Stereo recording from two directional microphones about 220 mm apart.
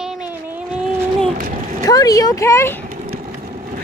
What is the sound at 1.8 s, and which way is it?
Speech, 15° left (ahead or behind).